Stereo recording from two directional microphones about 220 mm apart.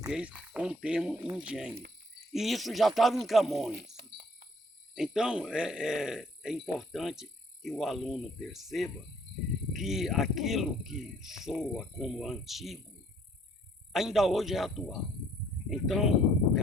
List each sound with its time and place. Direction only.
0.1 s a man's voice: 5° right (ahead or behind)
3.8 s insect: 45° right (ahead or behind)
4.9 s a man's voice: centre (ahead or behind)
13.9 s a man's voice: centre (ahead or behind)